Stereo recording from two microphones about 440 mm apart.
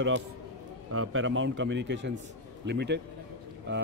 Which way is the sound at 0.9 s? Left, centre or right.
Right.